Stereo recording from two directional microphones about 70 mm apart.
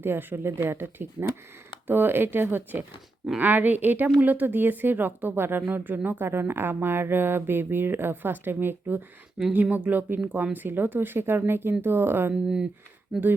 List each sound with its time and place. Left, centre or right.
0.0 s a woman's voice: right
12.3 s speech: centre